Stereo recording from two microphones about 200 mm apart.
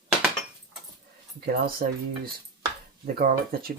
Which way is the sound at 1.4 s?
50° right (ahead or behind).